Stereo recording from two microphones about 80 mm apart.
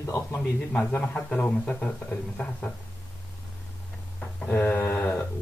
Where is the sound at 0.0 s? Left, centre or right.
Left.